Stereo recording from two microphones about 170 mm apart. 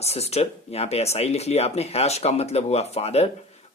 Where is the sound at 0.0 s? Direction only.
40° left (ahead or behind).